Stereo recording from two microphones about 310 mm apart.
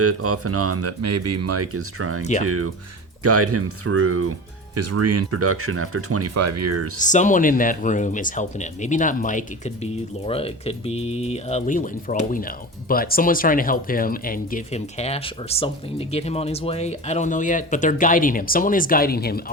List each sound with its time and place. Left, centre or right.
0.0 s speech: right
7.0 s speech: left